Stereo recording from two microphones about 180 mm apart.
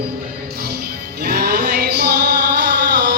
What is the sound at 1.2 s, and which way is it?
Music, 65° right (ahead or behind).